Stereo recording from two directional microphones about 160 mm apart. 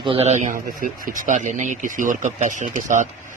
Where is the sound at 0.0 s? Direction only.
35° right (ahead or behind).